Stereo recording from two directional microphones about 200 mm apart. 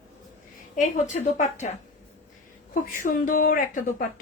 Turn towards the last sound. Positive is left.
turn(degrees=45)  # may be behind; listen again after turning